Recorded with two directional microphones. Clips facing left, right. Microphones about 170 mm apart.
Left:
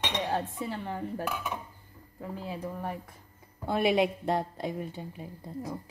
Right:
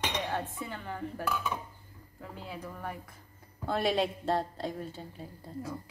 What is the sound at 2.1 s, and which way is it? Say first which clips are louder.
Speech: left 5 dB; 30° left (ahead or behind).